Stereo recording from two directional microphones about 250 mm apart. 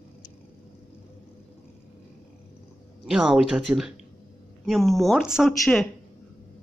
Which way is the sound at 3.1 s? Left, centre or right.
Centre.